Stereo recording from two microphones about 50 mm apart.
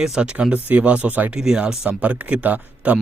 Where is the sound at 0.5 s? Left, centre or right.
Right.